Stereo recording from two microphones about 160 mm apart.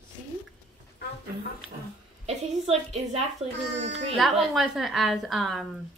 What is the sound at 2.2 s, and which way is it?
A woman's voice, 40° right (ahead or behind).